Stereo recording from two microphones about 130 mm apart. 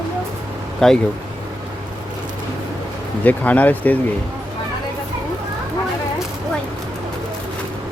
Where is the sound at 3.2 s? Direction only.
10° left (ahead or behind).